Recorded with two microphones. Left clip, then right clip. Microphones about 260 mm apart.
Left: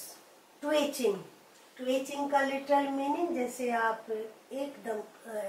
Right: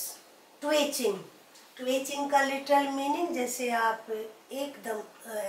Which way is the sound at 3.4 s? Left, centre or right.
Centre.